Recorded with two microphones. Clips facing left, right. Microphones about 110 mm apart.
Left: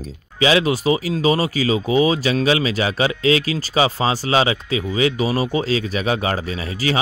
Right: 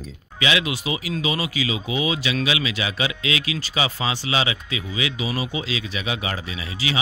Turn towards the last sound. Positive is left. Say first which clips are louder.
# left 6 dB
turn(degrees=45)  # may be behind; listen again after turning